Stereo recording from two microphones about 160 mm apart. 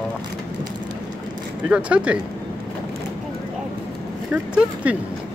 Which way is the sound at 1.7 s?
5° right (ahead or behind).